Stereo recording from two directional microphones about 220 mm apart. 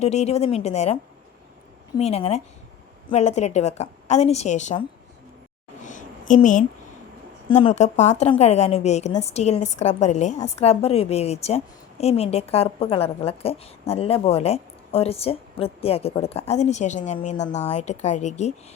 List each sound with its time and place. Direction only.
0.0 s a woman's voice: 30° left (ahead or behind)
2.0 s a woman's voice: 30° left (ahead or behind)
5.8 s a sound: 35° left (ahead or behind)
7.5 s a woman's voice: 30° left (ahead or behind)